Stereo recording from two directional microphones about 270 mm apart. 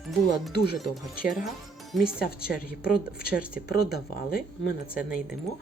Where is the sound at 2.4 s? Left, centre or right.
Centre.